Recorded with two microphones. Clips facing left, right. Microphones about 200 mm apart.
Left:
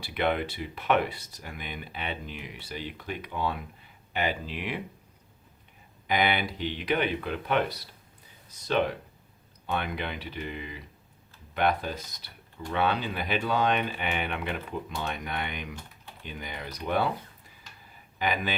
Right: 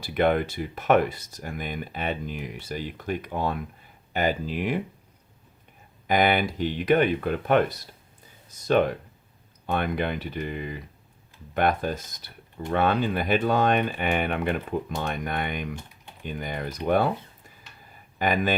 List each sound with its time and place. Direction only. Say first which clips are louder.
0.0 s speech: right 5 dB; 45° right (ahead or behind)
6.1 s speech: right 5 dB; 45° right (ahead or behind)
18.2 s speech: right 5 dB; 45° right (ahead or behind)